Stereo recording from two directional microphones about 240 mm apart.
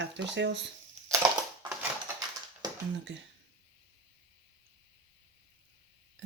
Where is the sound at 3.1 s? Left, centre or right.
Right.